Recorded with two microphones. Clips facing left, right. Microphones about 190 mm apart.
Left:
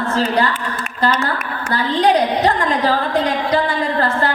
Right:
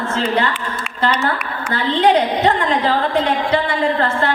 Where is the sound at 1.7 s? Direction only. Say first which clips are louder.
Right 1 dB; 40° left (ahead or behind).